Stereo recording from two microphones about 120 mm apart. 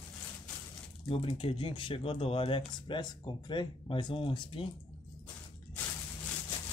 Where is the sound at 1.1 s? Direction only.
50° left (ahead or behind).